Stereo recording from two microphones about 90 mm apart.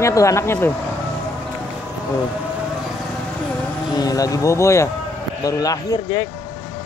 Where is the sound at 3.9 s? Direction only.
45° left (ahead or behind).